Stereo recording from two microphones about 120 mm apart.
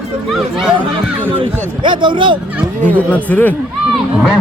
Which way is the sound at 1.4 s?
45° right (ahead or behind).